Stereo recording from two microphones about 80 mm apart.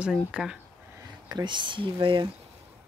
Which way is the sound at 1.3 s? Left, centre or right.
Right.